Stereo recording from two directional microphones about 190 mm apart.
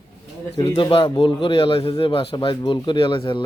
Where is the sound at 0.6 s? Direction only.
30° left (ahead or behind).